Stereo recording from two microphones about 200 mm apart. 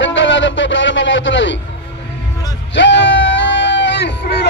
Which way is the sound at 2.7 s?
65° left (ahead or behind).